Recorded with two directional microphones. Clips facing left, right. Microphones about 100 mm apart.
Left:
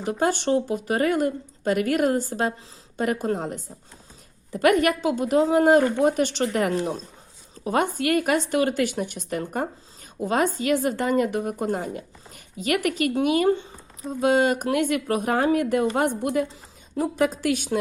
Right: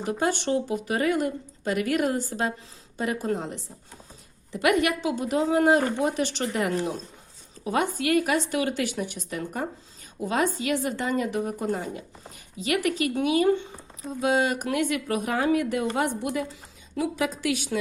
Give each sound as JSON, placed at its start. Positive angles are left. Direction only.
{"t": 0.0, "sound": "speech", "side_deg": 45}
{"t": 6.7, "sound": "speech", "side_deg": 30}
{"t": 7.6, "sound": "speech", "side_deg": 45}